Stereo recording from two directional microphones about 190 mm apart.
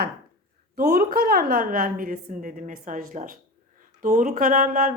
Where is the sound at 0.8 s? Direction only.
50° right (ahead or behind).